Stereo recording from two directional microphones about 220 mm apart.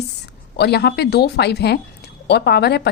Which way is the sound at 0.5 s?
50° left (ahead or behind).